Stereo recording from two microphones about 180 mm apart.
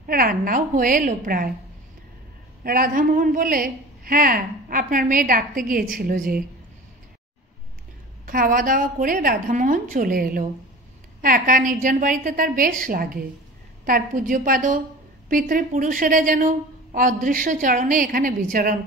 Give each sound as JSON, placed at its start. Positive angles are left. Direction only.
{"t": 0.0, "sound": "a woman's voice", "side_deg": -55}
{"t": 2.6, "sound": "a woman's voice", "side_deg": -55}
{"t": 8.3, "sound": "a woman's voice", "side_deg": -50}